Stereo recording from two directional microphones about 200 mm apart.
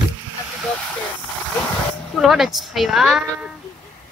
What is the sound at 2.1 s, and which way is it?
Speech, centre (ahead or behind).